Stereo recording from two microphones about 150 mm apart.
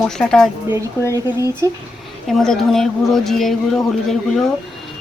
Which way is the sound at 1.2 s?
25° left (ahead or behind).